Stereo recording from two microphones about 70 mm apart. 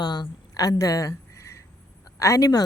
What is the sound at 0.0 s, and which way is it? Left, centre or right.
A woman's voice, left.